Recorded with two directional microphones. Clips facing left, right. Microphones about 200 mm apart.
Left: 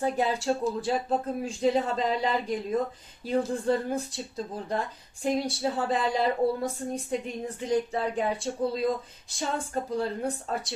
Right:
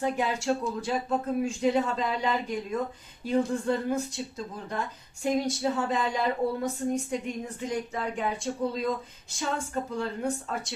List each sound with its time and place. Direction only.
0.0 s speech: 35° left (ahead or behind)